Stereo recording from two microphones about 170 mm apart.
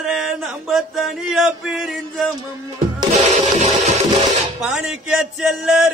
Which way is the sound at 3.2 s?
45° right (ahead or behind).